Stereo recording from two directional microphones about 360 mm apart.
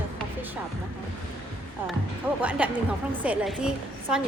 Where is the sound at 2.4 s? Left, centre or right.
Centre.